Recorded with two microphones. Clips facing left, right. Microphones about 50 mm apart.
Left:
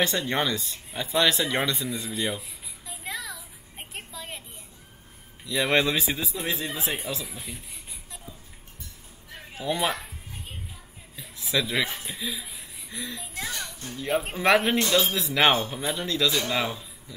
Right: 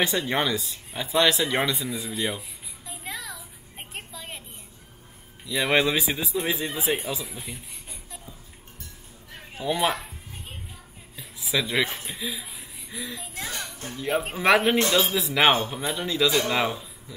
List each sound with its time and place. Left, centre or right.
0.0 s a sound: centre
5.4 s speech: centre
9.3 s music: centre
11.1 s speech: centre
13.5 s a sound: right
13.9 s speech: centre